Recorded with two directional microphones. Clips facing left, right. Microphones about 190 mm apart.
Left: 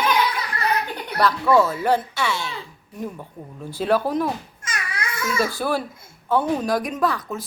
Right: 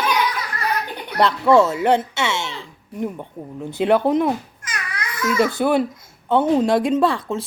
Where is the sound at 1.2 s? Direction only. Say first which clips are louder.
Right 3 dB; 25° right (ahead or behind).